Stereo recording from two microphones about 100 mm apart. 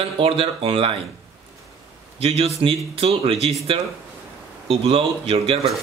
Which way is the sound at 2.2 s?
85° right.